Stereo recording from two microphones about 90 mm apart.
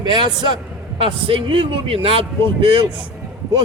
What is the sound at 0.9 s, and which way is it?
Speech, 80° right.